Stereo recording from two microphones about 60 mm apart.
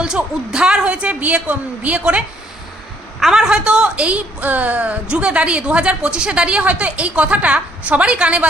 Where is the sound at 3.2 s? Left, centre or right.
Centre.